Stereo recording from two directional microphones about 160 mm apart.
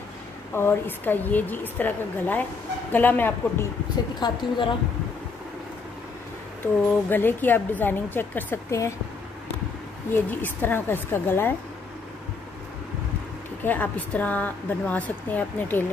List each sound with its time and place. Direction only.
0.6 s a woman's voice: 15° left (ahead or behind)
4.2 s a woman's voice: 30° left (ahead or behind)
6.6 s a woman's voice: 10° left (ahead or behind)
10.1 s a woman's voice: 15° left (ahead or behind)
13.6 s a woman's voice: 10° left (ahead or behind)